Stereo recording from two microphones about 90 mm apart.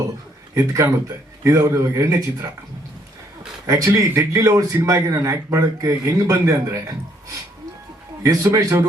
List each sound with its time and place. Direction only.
0.5 s a man's voice: 35° right (ahead or behind)
3.9 s a man's voice: 35° right (ahead or behind)